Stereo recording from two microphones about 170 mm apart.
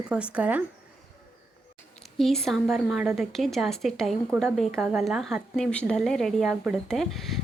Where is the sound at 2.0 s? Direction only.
Centre (ahead or behind).